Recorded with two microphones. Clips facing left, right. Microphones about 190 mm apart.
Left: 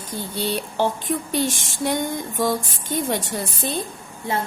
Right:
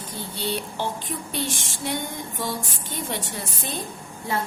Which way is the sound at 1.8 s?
45° left (ahead or behind).